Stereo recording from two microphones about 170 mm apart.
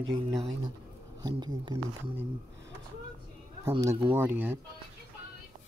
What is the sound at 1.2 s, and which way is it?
Speech, 25° right (ahead or behind).